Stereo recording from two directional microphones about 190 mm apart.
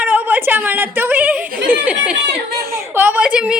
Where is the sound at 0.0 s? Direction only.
10° right (ahead or behind).